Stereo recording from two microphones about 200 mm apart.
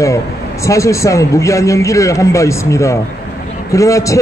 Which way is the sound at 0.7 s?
15° left (ahead or behind).